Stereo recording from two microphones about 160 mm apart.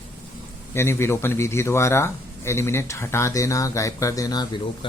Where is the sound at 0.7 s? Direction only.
15° left (ahead or behind).